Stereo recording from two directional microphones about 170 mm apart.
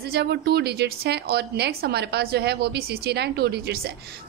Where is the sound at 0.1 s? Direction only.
75° right (ahead or behind).